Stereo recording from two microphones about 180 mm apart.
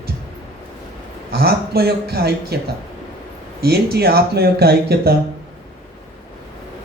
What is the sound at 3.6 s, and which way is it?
A man's voice, 60° right (ahead or behind).